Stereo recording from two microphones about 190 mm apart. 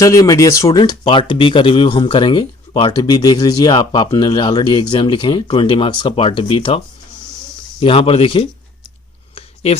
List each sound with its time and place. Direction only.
0.0 s speech: 15° left (ahead or behind)
9.6 s speech: 35° left (ahead or behind)